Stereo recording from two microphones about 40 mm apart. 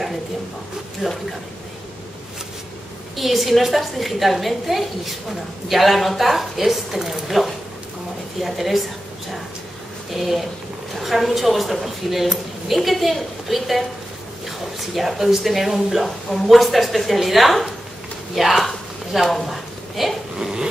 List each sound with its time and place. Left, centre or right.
1.0 s a woman's voice: centre
3.2 s a woman's voice: centre
10.1 s a woman's voice: centre
18.7 s a sound: centre
20.3 s stir: centre